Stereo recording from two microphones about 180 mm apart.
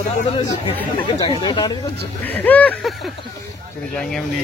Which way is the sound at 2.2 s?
10° left (ahead or behind).